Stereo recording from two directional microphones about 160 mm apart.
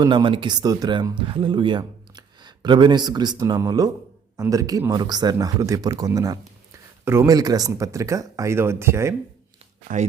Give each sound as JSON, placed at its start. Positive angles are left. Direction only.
{"t": 0.0, "sound": "speech", "side_deg": -30}